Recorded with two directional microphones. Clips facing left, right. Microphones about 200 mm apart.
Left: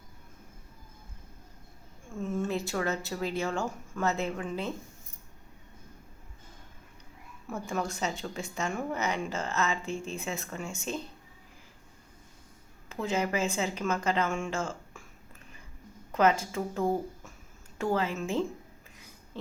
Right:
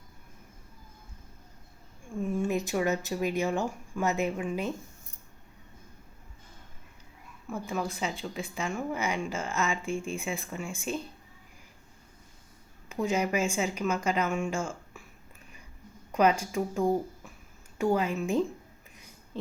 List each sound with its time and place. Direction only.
2.1 s speech: 15° right (ahead or behind)
7.7 s speech: 5° right (ahead or behind)
12.9 s speech: 15° right (ahead or behind)
14.5 s a sound: 10° right (ahead or behind)
16.1 s speech: 15° right (ahead or behind)